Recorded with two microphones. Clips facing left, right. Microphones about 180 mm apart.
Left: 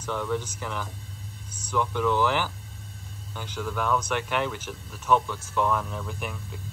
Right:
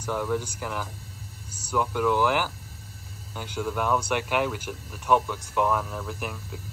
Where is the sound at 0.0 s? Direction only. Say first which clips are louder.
Right 1 dB; 10° right (ahead or behind).